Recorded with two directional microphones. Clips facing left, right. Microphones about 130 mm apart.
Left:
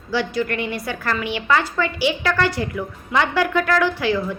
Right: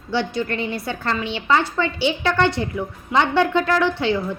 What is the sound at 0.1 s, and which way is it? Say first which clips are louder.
A woman's voice: left 1 dB; 25° right (ahead or behind).